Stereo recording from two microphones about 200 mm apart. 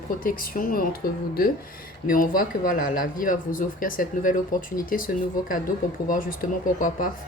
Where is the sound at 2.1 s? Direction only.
45° left (ahead or behind).